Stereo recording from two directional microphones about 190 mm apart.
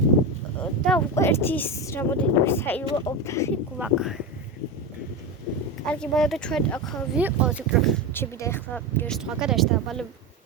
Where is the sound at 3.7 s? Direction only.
5° right (ahead or behind).